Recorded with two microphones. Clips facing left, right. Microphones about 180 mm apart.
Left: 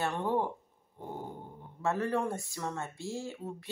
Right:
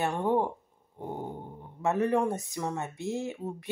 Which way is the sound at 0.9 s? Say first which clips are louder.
Right 4 dB; 20° right (ahead or behind).